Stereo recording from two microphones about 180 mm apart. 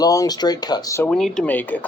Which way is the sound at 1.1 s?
5° left (ahead or behind).